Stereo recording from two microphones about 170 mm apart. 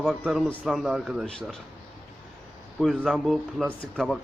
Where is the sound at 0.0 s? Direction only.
Centre (ahead or behind).